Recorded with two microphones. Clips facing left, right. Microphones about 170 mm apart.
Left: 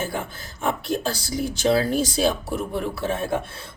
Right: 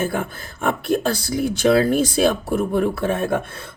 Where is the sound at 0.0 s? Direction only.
55° right (ahead or behind).